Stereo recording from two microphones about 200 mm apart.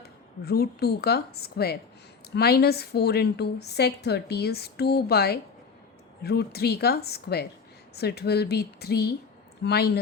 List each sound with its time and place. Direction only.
0.0 s a woman's voice: 50° left (ahead or behind)